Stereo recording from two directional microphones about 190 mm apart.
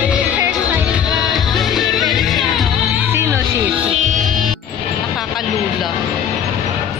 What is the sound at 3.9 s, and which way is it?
Music, 40° right (ahead or behind).